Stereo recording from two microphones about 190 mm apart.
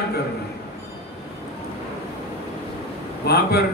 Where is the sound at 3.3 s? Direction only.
55° left (ahead or behind).